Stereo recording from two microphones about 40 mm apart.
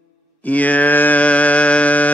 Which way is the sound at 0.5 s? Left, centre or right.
Left.